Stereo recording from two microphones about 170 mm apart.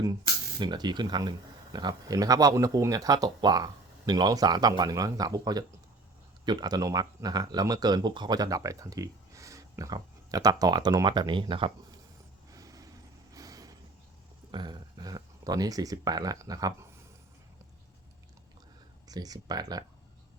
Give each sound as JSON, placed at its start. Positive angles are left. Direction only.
{"t": 0.6, "sound": "speech", "side_deg": -25}
{"t": 12.5, "sound": "vehicle", "side_deg": -20}
{"t": 14.5, "sound": "speech", "side_deg": -25}
{"t": 19.0, "sound": "speech", "side_deg": -20}